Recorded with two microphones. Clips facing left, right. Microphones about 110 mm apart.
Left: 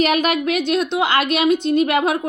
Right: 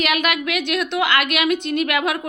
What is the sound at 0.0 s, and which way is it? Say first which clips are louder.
A woman's voice: left 4 dB; 35° left (ahead or behind).